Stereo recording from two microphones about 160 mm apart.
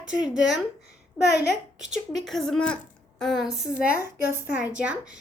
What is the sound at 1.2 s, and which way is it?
Speech, 90° left.